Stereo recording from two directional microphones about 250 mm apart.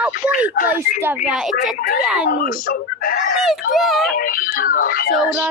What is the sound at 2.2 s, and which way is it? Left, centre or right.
Speech, left.